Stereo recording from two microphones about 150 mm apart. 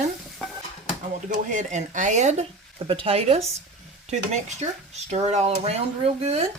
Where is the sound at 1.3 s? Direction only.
55° right (ahead or behind).